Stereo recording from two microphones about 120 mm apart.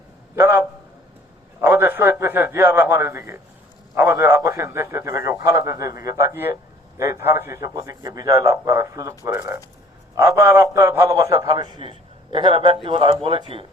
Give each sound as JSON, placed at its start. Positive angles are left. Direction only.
{"t": 0.3, "sound": "a sound", "side_deg": -20}
{"t": 1.6, "sound": "a man's voice", "side_deg": -20}
{"t": 11.4, "sound": "a man's voice", "side_deg": -40}